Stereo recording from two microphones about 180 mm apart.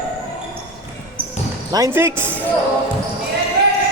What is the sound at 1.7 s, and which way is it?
Speech, 15° right (ahead or behind).